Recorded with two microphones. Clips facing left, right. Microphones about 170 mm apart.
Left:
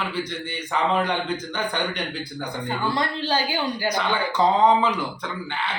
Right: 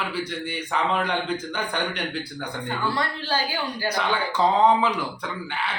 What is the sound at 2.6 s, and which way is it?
Speech, 15° left (ahead or behind).